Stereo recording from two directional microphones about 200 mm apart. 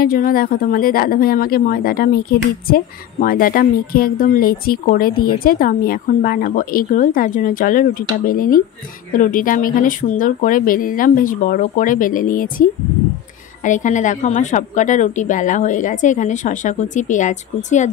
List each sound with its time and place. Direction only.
0.0 s speech: 45° left (ahead or behind)
13.7 s a woman's voice: 40° left (ahead or behind)